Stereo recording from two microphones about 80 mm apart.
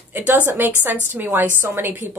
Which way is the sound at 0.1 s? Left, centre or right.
Right.